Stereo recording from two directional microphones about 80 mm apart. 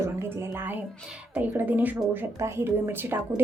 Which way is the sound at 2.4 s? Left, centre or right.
Right.